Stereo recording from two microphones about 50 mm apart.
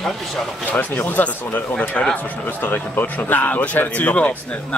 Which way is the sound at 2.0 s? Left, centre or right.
Left.